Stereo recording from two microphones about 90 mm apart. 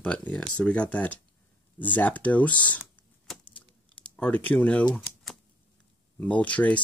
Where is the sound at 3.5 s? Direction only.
10° left (ahead or behind).